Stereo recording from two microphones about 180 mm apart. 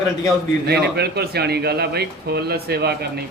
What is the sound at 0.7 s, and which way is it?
Speech, 65° right (ahead or behind).